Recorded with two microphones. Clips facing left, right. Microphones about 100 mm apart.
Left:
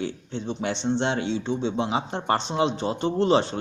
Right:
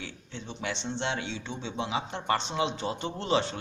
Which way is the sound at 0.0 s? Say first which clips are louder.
Left 11 dB; 35° left (ahead or behind).